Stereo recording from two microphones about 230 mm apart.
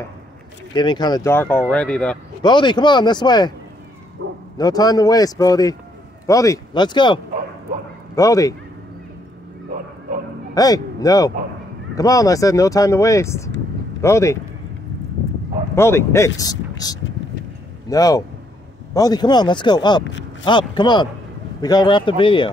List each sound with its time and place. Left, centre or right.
0.7 s speech: centre
2.4 s speech: centre
4.6 s speech: centre
8.2 s speech: centre
10.5 s speech: centre
15.7 s speech: centre